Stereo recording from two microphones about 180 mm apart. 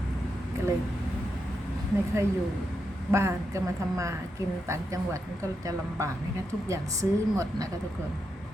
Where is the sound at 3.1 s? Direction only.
15° right (ahead or behind).